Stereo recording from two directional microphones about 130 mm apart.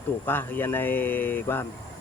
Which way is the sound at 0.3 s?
15° left (ahead or behind).